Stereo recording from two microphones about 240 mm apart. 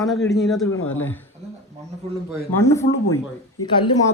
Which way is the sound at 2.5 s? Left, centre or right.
Centre.